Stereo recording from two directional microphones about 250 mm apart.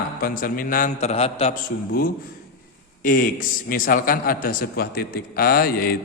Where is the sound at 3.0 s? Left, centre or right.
Left.